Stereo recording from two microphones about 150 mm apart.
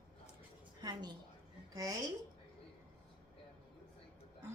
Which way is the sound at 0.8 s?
30° right (ahead or behind).